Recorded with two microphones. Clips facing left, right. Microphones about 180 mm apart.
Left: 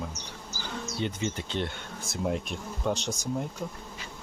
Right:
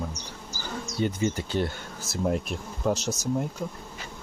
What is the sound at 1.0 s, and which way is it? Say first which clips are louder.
Speech: right 5 dB; 45° right (ahead or behind).